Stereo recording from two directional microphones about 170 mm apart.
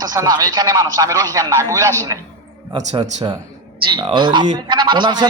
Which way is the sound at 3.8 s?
30° right (ahead or behind).